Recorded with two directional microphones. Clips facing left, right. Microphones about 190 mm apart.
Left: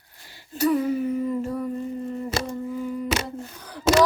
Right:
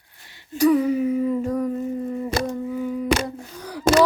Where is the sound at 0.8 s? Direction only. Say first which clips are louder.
Right 3 dB; 10° right (ahead or behind).